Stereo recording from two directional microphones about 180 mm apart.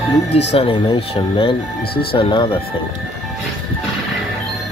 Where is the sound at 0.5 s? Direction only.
30° left (ahead or behind).